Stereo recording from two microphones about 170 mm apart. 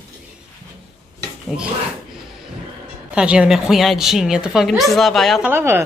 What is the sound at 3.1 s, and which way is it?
A woman's voice, 5° right (ahead or behind).